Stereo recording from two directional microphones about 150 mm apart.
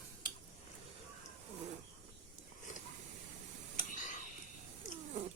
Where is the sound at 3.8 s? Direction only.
60° left (ahead or behind).